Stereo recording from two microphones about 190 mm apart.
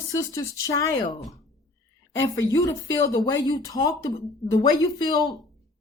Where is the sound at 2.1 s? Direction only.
15° left (ahead or behind).